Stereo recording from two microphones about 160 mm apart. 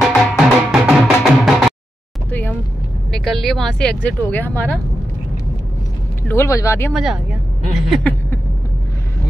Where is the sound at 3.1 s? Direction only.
Centre (ahead or behind).